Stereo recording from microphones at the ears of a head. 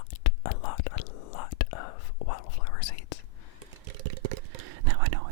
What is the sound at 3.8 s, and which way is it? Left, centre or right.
Whispering, right.